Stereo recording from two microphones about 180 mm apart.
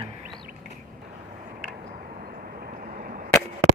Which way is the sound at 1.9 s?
45° right (ahead or behind).